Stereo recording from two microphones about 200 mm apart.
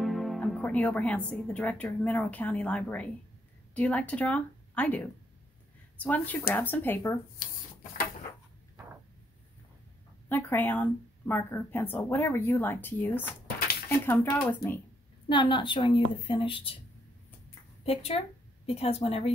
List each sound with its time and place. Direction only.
0.0 s speech: centre (ahead or behind)
7.4 s speech: 50° left (ahead or behind)
10.2 s speech: 10° left (ahead or behind)
15.2 s a woman's voice: 25° left (ahead or behind)
17.8 s a woman's voice: 30° left (ahead or behind)